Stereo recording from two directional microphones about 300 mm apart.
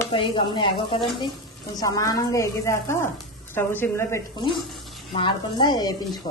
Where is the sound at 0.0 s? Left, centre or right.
Centre.